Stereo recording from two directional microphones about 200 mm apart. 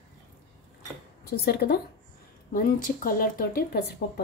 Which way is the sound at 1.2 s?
50° left (ahead or behind).